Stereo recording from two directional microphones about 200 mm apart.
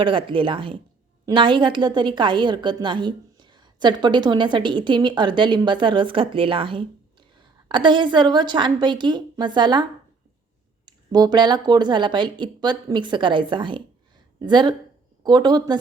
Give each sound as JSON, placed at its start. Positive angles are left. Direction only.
{"t": 0.0, "sound": "a woman's voice", "side_deg": -25}
{"t": 10.8, "sound": "a woman's voice", "side_deg": -20}